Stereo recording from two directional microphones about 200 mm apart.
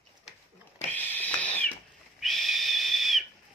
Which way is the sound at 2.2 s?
Centre (ahead or behind).